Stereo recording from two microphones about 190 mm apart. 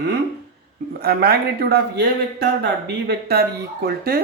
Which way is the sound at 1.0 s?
55° right (ahead or behind).